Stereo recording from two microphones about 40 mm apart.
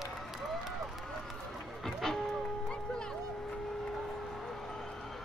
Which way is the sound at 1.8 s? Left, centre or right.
Centre.